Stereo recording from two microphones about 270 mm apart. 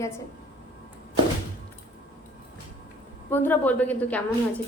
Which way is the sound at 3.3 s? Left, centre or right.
Centre.